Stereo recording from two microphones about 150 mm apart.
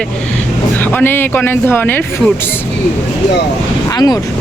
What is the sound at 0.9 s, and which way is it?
Speech, 15° left (ahead or behind).